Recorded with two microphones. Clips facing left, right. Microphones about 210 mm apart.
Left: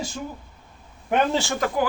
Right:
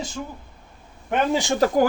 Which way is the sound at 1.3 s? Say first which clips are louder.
Right 2 dB; 15° right (ahead or behind).